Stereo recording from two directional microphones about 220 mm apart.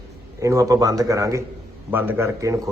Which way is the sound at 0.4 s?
15° right (ahead or behind).